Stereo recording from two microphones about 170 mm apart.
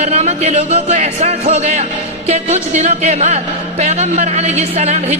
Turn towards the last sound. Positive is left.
turn(degrees=-40)  # may be behind; listen again after turning